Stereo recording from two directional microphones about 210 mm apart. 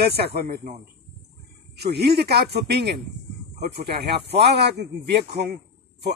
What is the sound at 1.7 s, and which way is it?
Speech, 50° right (ahead or behind).